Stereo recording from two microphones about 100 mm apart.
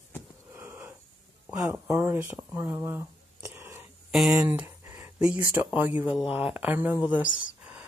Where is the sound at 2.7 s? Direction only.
30° right (ahead or behind).